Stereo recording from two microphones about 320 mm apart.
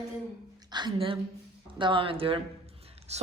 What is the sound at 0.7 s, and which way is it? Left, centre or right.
A woman's voice, centre.